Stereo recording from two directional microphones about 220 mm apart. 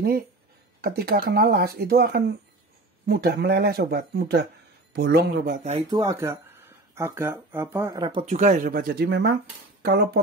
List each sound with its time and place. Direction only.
0.7 s speech: 45° right (ahead or behind)
5.9 s speech: 15° right (ahead or behind); by 9.9 s 50° right (ahead or behind)